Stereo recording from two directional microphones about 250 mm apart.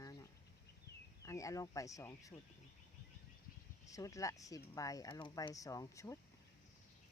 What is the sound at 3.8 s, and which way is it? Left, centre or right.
Speech, centre.